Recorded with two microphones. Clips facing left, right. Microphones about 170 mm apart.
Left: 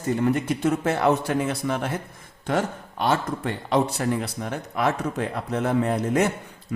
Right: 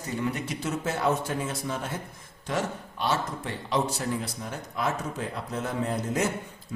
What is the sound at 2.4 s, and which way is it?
Speech, 55° left (ahead or behind).